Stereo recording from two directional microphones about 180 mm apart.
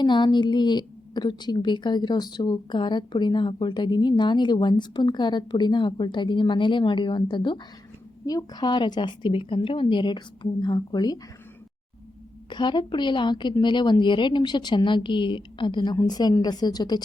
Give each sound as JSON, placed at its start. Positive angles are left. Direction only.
{"t": 0.0, "sound": "a woman's voice", "side_deg": 25}
{"t": 12.5, "sound": "a woman's voice", "side_deg": 25}